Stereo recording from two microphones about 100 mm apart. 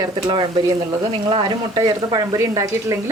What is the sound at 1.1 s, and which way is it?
Speech, 60° right (ahead or behind).